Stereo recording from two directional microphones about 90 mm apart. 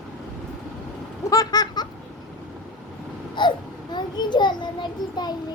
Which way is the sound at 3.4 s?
55° left (ahead or behind).